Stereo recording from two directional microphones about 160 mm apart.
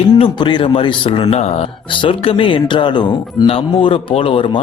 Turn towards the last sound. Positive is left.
turn(degrees=35)  # may be behind; listen again after turning